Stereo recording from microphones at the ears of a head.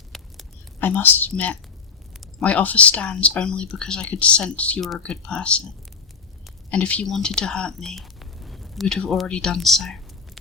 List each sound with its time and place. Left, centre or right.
0.8 s speech: left